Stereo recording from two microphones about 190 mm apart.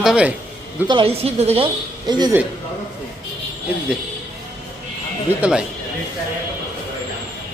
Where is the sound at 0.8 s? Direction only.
25° right (ahead or behind).